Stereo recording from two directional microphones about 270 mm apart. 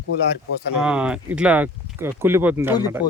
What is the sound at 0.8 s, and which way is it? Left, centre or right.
Speech, centre.